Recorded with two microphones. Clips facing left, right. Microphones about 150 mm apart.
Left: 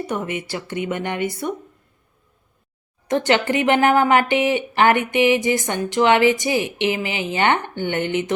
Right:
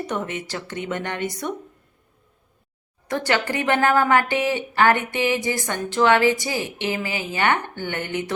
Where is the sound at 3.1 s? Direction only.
20° left (ahead or behind).